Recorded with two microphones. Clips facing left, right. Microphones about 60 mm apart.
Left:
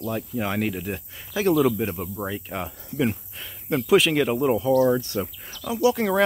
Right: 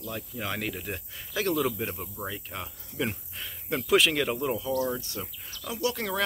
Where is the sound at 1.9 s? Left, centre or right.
Left.